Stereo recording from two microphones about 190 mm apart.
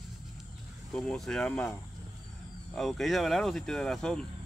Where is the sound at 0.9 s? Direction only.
Centre (ahead or behind).